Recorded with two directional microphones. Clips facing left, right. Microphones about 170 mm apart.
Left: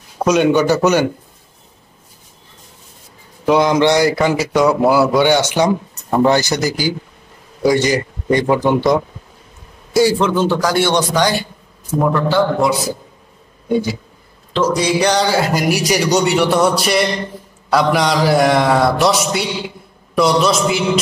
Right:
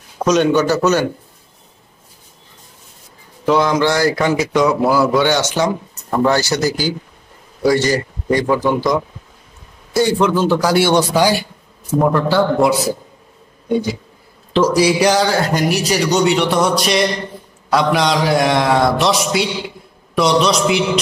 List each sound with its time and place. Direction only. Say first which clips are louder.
0.2 s speech: left 1 dB; 10° left (ahead or behind)
3.4 s speech: left 2 dB; 15° left (ahead or behind)
4.1 s a man's voice: even; 5° left (ahead or behind)
10.1 s a man's voice: right 1 dB; centre (ahead or behind)
14.5 s a man's voice: right 2 dB; 10° right (ahead or behind)